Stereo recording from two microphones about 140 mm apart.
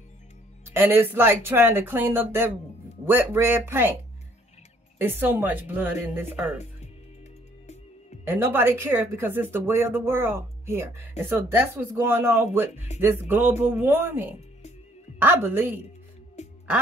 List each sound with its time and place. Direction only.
0.7 s speech: 15° right (ahead or behind)
4.9 s speech: 15° right (ahead or behind)
8.3 s speech: 15° right (ahead or behind)
16.4 s music: 55° left (ahead or behind)